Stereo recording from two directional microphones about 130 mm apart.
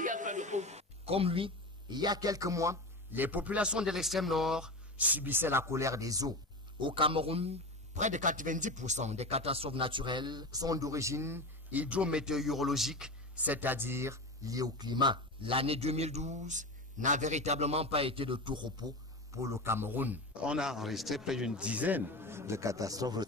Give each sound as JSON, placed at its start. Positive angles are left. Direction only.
{"t": 0.0, "sound": "speech", "side_deg": -75}
{"t": 6.8, "sound": "a man's voice", "side_deg": -40}
{"t": 19.3, "sound": "a man's voice", "side_deg": -25}